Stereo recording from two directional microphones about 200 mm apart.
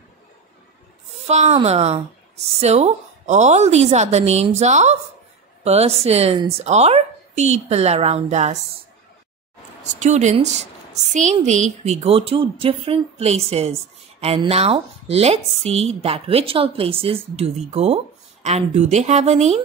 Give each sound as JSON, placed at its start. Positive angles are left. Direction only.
{"t": 1.2, "sound": "speech", "side_deg": -35}
{"t": 9.8, "sound": "speech", "side_deg": -35}